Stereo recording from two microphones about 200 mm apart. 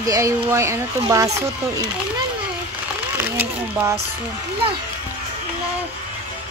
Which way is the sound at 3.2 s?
10° right (ahead or behind).